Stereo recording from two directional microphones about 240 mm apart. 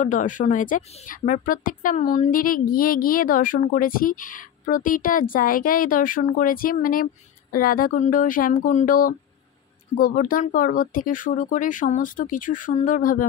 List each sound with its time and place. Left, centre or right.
0.0 s a woman's voice: left